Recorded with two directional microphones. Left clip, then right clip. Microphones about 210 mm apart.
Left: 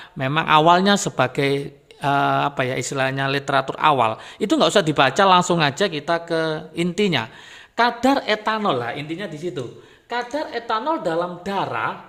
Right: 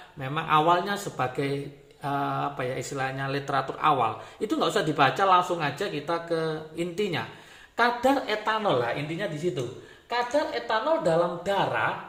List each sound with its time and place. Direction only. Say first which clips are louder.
0.2 s speech: left 7 dB; 50° left (ahead or behind)